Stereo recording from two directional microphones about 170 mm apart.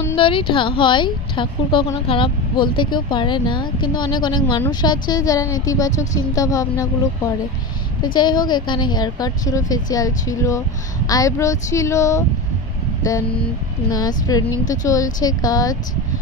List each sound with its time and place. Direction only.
0.1 s speech: 30° left (ahead or behind)
13.9 s speech: 20° left (ahead or behind)